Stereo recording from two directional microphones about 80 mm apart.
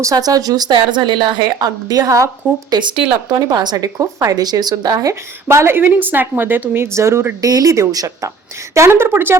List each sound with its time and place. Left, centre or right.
0.0 s speech: right
1.5 s a woman's voice: right
3.3 s speech: right
3.9 s a woman's voice: right
7.4 s a woman's voice: right
8.7 s a woman's voice: right